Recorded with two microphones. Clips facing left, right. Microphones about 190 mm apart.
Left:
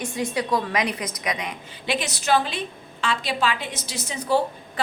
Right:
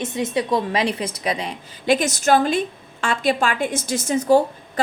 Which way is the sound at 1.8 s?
45° right (ahead or behind).